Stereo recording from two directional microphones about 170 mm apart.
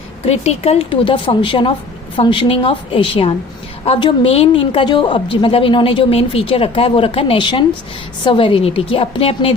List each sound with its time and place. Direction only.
0.3 s a woman's voice: 35° left (ahead or behind)